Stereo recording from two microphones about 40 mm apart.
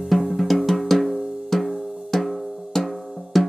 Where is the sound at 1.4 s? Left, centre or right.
Centre.